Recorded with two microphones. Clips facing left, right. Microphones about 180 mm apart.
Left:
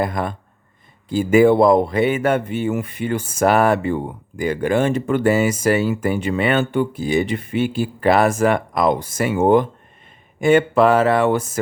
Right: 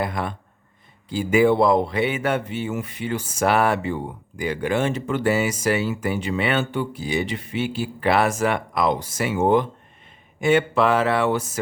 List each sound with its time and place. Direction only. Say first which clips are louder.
0.0 s a man's voice: left 4 dB; 45° left (ahead or behind)